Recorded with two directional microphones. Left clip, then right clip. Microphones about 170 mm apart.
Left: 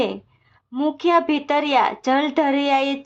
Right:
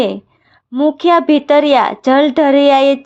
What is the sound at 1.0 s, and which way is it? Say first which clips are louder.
A woman's voice: right 6 dB; 30° right (ahead or behind).